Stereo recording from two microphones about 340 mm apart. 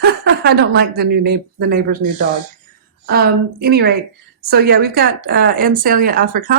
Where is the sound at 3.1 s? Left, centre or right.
Right.